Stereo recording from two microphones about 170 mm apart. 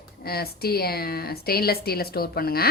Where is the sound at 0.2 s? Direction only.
65° left (ahead or behind).